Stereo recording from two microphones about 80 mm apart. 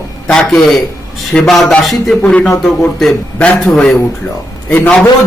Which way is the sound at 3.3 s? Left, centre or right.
Centre.